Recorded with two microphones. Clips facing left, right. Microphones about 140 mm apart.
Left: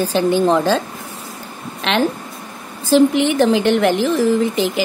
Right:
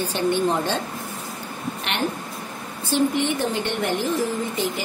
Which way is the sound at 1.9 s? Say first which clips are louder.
Left 10 dB; 90° left.